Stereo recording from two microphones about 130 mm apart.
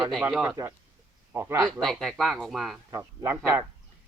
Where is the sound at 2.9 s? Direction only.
20° right (ahead or behind).